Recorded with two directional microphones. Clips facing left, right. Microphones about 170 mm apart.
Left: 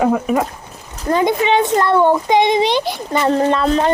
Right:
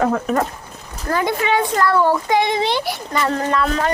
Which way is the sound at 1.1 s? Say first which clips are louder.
Left 4 dB; 20° left (ahead or behind).